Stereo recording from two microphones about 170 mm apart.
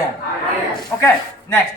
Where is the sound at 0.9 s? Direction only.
10° left (ahead or behind).